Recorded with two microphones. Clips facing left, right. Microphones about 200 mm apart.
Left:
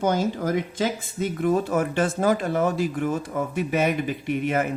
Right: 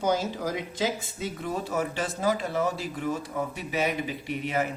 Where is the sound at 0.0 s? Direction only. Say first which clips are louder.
Left 4 dB; 55° left (ahead or behind).